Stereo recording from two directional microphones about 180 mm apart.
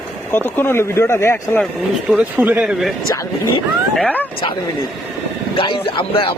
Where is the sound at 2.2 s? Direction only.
10° right (ahead or behind).